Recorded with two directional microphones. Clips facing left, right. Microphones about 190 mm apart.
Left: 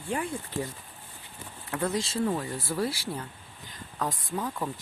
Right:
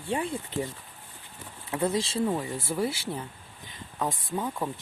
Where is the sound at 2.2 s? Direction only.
15° right (ahead or behind).